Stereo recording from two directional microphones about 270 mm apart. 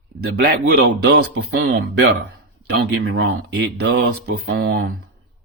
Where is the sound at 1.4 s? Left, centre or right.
Right.